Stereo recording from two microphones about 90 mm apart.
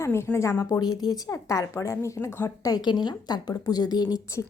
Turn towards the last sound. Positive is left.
turn(degrees=45)  # may be behind; listen again after turning